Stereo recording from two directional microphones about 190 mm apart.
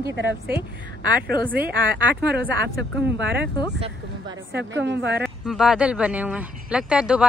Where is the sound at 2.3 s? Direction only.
65° right (ahead or behind).